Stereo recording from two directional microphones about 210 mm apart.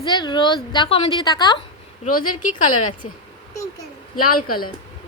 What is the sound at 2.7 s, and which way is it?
Speech, 90° left.